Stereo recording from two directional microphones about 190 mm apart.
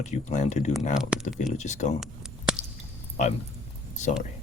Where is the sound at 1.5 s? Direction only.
40° left (ahead or behind).